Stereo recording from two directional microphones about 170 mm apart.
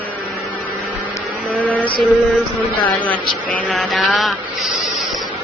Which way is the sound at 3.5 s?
5° left (ahead or behind).